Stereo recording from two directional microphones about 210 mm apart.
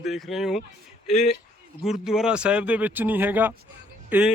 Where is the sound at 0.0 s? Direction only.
Centre (ahead or behind).